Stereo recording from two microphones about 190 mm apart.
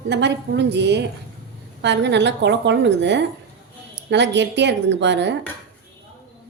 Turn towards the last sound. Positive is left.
turn(degrees=-65)  # may be behind; listen again after turning